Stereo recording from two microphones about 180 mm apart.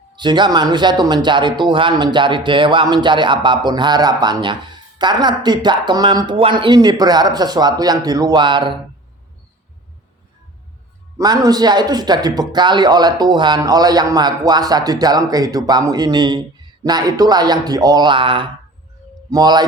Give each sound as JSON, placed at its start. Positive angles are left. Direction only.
{"t": 0.2, "sound": "speech", "side_deg": -25}
{"t": 11.2, "sound": "speech", "side_deg": -20}